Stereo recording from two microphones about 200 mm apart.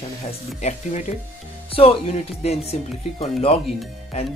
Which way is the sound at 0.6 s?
35° left (ahead or behind).